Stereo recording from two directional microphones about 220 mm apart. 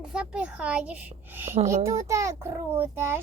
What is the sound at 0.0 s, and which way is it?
A child's voice, 5° right (ahead or behind).